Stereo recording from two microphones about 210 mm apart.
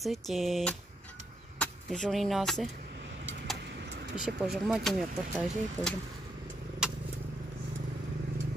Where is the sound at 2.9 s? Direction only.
55° right (ahead or behind).